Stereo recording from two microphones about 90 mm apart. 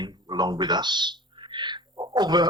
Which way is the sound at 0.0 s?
55° right (ahead or behind).